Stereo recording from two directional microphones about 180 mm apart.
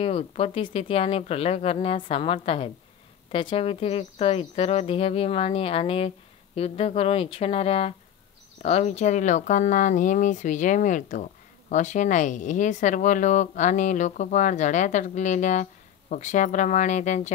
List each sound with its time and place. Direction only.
0.0 s speech: 35° left (ahead or behind)